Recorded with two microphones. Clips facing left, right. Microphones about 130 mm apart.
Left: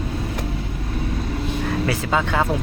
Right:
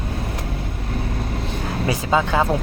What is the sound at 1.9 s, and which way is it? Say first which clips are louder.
Speech: right 5 dB; 20° right (ahead or behind).